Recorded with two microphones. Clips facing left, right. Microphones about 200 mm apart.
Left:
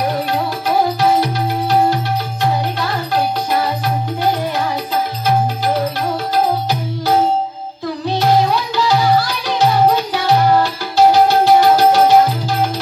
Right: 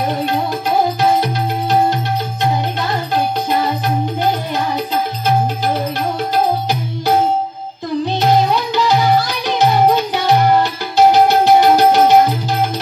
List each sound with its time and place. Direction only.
0.1 s music: 20° right (ahead or behind)
8.1 s music: 20° right (ahead or behind)